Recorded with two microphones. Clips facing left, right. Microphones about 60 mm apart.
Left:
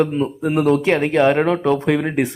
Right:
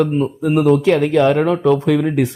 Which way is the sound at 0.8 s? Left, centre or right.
Left.